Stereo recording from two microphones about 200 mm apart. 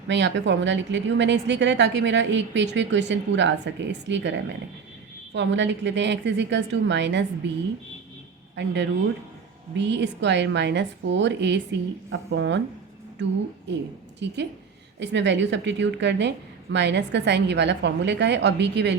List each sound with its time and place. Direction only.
0.1 s a woman's voice: 65° right (ahead or behind)
8.5 s a woman's voice: 60° right (ahead or behind)
14.2 s a woman's voice: 60° right (ahead or behind)